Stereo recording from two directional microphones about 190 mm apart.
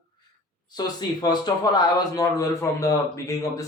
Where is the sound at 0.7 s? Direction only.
20° left (ahead or behind).